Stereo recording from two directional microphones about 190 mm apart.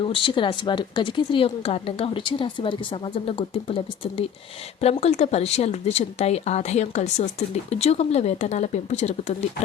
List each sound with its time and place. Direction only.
0.0 s a woman's voice: 25° left (ahead or behind)